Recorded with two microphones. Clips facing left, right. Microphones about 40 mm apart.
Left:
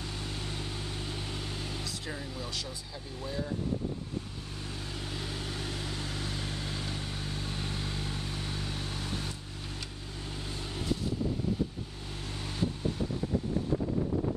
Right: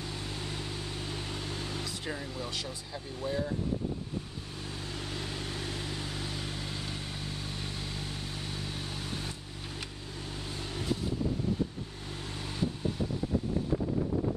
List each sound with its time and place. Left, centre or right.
0.2 s vehicle: centre
2.0 s speech: centre
3.2 s speech: right
5.0 s vehicle: centre
10.5 s vehicle: centre